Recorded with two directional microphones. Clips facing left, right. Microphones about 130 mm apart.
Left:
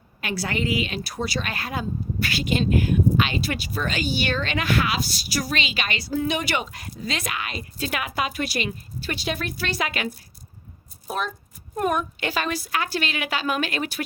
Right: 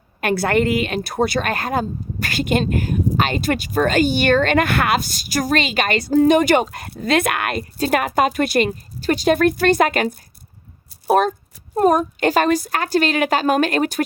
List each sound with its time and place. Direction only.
0.2 s speech: 55° right (ahead or behind)
11.1 s speech: 70° right (ahead or behind)
11.7 s speech: 35° right (ahead or behind)